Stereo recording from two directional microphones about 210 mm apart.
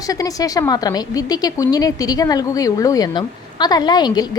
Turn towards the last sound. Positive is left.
turn(degrees=20)  # may be behind; listen again after turning